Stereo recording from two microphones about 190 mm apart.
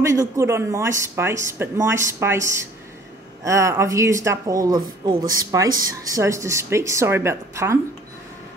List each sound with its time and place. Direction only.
0.0 s speech: 15° right (ahead or behind)